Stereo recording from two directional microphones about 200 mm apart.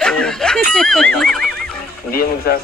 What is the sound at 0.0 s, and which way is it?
Speech, 5° left (ahead or behind).